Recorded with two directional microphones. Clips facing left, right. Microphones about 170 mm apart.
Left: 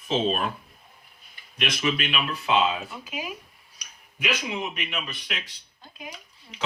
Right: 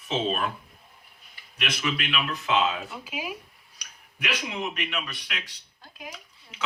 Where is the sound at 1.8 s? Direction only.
25° left (ahead or behind).